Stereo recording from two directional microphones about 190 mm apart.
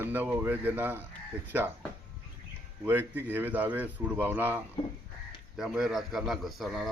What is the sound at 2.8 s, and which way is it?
A man's voice, 10° right (ahead or behind).